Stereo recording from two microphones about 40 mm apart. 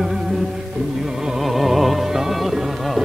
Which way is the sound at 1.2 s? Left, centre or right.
Centre.